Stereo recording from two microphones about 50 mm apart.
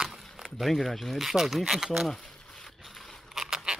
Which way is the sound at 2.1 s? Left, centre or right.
Centre.